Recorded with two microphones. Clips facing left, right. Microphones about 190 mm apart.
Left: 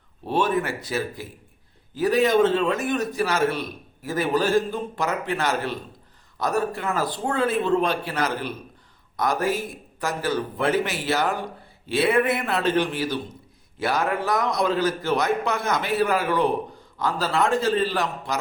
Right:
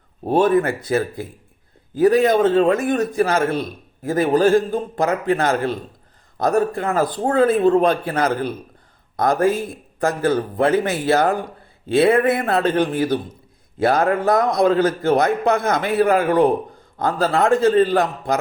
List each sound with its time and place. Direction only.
0.3 s a man's voice: 50° right (ahead or behind)